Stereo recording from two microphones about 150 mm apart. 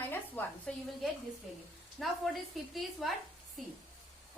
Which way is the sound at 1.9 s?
Centre (ahead or behind).